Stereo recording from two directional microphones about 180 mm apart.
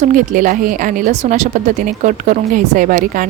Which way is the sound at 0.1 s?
50° right (ahead or behind).